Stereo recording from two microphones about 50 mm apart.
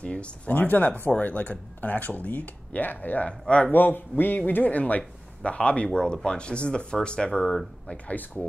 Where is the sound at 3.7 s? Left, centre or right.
Left; by 7.9 s centre.